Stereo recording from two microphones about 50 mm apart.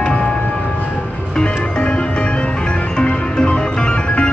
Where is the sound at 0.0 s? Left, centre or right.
Centre.